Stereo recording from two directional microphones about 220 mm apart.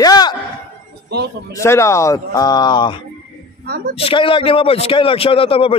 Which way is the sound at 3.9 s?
25° left (ahead or behind).